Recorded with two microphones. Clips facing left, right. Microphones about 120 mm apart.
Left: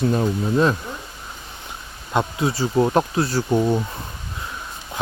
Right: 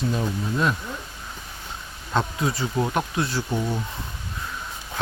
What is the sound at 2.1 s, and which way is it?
Bee, 20° left (ahead or behind).